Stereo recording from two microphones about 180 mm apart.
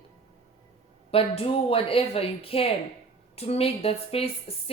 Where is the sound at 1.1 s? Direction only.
30° left (ahead or behind).